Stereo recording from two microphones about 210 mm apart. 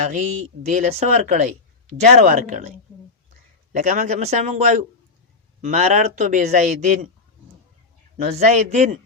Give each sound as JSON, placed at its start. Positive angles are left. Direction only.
{"t": 0.0, "sound": "speech", "side_deg": -35}
{"t": 3.7, "sound": "speech", "side_deg": -35}
{"t": 8.2, "sound": "speech", "side_deg": -30}